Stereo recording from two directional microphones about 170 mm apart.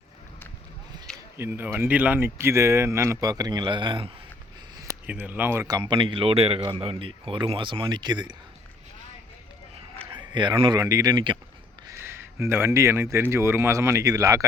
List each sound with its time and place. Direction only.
1.4 s speech: 10° right (ahead or behind); by 4.1 s 30° right (ahead or behind)
5.0 s speech: 10° right (ahead or behind)
10.1 s speech: 25° right (ahead or behind)
11.9 s speech: 15° right (ahead or behind)